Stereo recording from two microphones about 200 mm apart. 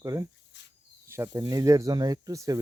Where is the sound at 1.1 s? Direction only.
15° right (ahead or behind).